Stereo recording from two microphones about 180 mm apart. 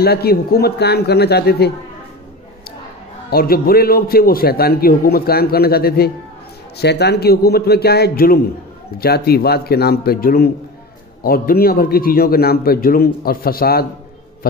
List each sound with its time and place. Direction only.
0.0 s a man's voice: 60° left (ahead or behind)
3.3 s a man's voice: 55° left (ahead or behind)